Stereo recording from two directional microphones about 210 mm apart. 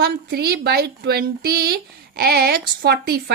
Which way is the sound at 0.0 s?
50° right (ahead or behind).